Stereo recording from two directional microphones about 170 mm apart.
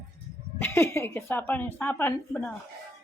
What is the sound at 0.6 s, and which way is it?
A woman's voice, 15° left (ahead or behind).